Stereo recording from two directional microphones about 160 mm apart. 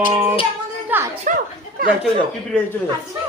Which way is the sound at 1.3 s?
55° right (ahead or behind).